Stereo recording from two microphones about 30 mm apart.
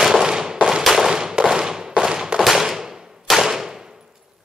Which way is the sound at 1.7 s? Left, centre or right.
Centre.